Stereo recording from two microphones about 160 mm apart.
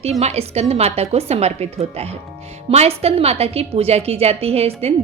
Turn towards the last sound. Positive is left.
turn(degrees=-40)  # may be behind; listen again after turning